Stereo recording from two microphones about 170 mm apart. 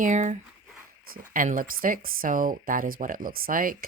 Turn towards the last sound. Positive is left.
turn(degrees=-55)  # may be behind; listen again after turning